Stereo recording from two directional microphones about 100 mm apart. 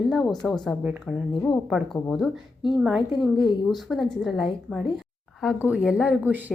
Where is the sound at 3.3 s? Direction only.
50° left (ahead or behind).